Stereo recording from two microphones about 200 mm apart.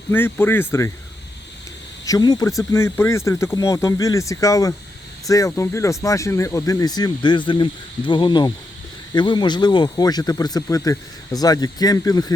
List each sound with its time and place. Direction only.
0.1 s speech: 10° left (ahead or behind)
2.0 s speech: 20° left (ahead or behind)